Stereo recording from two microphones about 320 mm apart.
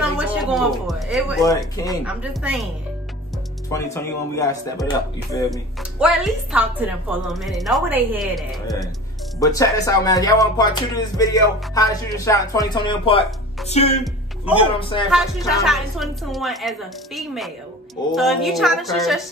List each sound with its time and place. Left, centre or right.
0.0 s a woman's voice: centre
3.7 s speech: centre
5.9 s a woman's voice: centre
9.4 s speech: centre
15.0 s a woman's voice: centre